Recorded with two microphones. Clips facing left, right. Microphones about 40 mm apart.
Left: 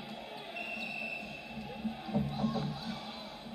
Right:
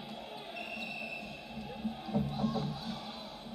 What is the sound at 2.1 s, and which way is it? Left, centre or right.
Music, left.